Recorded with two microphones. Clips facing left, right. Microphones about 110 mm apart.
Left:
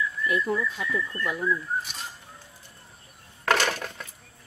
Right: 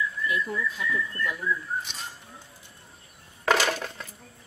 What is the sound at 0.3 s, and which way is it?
Speech, 45° left (ahead or behind).